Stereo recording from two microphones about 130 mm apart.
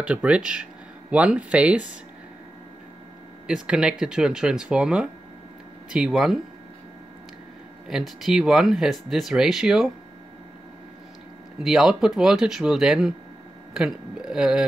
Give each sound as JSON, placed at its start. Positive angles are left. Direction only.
{"t": 0.1, "sound": "speech", "side_deg": -10}
{"t": 3.4, "sound": "speech", "side_deg": -5}
{"t": 7.9, "sound": "speech", "side_deg": -5}
{"t": 11.6, "sound": "speech", "side_deg": -5}